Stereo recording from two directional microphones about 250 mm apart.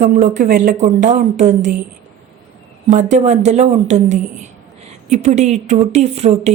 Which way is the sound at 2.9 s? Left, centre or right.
Right.